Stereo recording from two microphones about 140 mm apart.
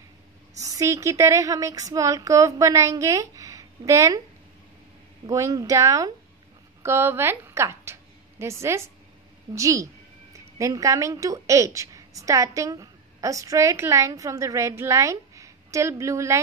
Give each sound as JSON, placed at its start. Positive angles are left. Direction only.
{"t": 0.6, "sound": "a woman's voice", "side_deg": -25}
{"t": 5.2, "sound": "a woman's voice", "side_deg": -25}